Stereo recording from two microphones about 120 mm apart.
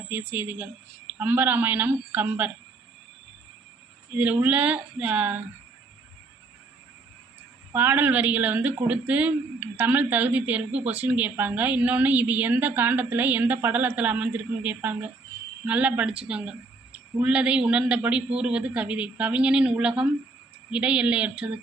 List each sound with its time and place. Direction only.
0.1 s a woman's voice: 15° right (ahead or behind)
4.1 s a woman's voice: 15° right (ahead or behind)
7.7 s a woman's voice: 15° right (ahead or behind)